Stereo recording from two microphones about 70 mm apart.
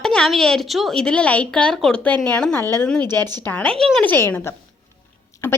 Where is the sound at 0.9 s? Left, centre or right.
Centre.